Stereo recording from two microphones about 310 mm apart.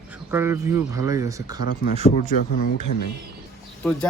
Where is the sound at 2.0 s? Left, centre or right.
Left.